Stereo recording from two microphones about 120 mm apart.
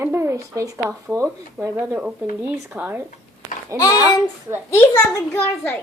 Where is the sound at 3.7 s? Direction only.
25° right (ahead or behind).